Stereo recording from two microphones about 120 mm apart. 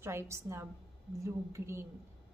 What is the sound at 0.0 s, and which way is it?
A woman's voice, 20° right (ahead or behind).